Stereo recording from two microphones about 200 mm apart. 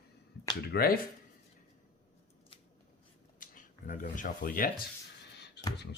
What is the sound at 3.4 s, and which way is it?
Speech, 40° left (ahead or behind).